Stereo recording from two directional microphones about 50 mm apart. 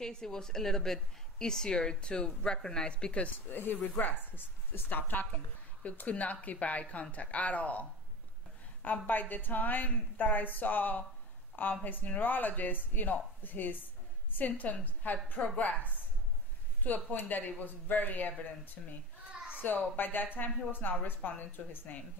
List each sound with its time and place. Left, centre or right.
0.0 s a woman's voice: centre
3.4 s a woman's voice: left
8.8 s a woman's voice: left
18.8 s a woman's voice: centre
19.6 s a woman's voice: left